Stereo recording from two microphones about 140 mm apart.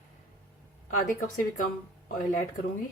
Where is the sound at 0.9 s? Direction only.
70° left (ahead or behind).